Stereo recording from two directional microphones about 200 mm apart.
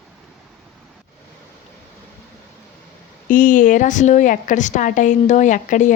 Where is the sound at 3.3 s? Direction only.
40° left (ahead or behind).